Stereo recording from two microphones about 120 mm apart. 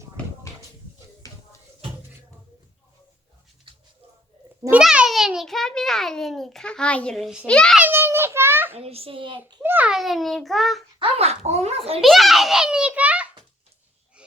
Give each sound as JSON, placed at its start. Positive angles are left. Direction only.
{"t": 1.2, "sound": "music", "side_deg": 30}
{"t": 3.7, "sound": "a sound", "side_deg": -45}
{"t": 4.8, "sound": "a child's voice", "side_deg": -5}
{"t": 7.8, "sound": "a sound", "side_deg": -20}
{"t": 8.8, "sound": "a child's voice", "side_deg": -55}
{"t": 9.6, "sound": "a child's voice", "side_deg": -15}
{"t": 9.9, "sound": "a child's voice", "side_deg": 0}
{"t": 11.0, "sound": "speech", "side_deg": -60}
{"t": 11.9, "sound": "a child's voice", "side_deg": 0}